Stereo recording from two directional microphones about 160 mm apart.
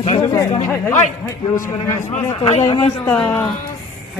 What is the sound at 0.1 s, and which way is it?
Speech, 30° left (ahead or behind).